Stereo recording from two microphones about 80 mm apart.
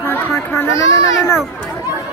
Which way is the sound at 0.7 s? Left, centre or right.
Left.